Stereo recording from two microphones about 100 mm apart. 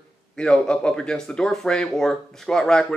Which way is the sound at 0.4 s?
5° left (ahead or behind).